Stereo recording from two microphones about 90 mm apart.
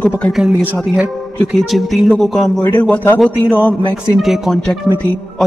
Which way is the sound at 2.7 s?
15° left (ahead or behind).